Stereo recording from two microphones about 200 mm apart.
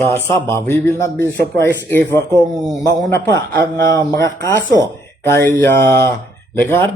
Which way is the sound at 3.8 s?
15° left (ahead or behind).